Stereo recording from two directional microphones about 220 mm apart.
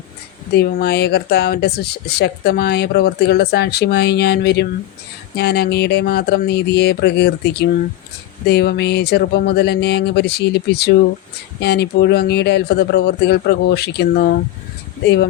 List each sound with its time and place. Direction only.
0.5 s speech: 45° left (ahead or behind)